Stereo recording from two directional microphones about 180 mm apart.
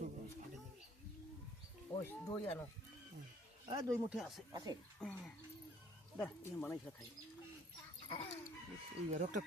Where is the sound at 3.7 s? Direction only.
20° right (ahead or behind).